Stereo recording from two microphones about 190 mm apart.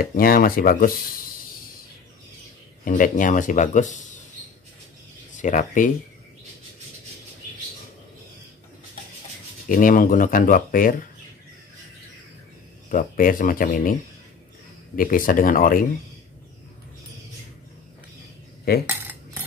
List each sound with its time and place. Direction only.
0.0 s speech: 50° left (ahead or behind)
2.8 s speech: 45° left (ahead or behind)
5.4 s speech: 40° left (ahead or behind)
9.7 s speech: 45° left (ahead or behind)
12.9 s speech: 45° left (ahead or behind)
15.0 s speech: 45° left (ahead or behind)
18.7 s speech: 55° left (ahead or behind)